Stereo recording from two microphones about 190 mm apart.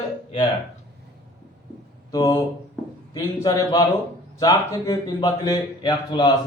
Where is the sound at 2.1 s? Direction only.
20° left (ahead or behind).